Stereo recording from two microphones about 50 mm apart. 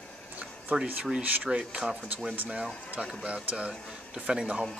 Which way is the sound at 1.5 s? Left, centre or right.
Centre.